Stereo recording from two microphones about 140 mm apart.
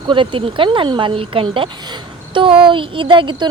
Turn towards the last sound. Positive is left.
turn(degrees=-35)  # may be behind; listen again after turning